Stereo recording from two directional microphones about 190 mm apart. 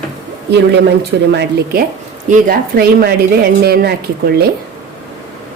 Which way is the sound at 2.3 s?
50° right (ahead or behind).